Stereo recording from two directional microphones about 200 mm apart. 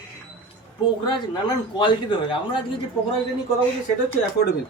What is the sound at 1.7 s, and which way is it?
Speech, 25° left (ahead or behind).